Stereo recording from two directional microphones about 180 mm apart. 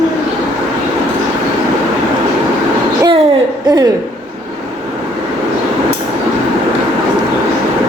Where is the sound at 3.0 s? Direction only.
25° right (ahead or behind).